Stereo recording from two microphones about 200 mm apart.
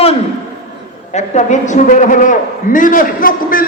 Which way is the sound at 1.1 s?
35° left (ahead or behind).